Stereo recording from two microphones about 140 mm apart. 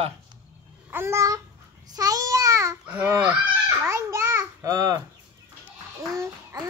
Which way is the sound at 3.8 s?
15° right (ahead or behind).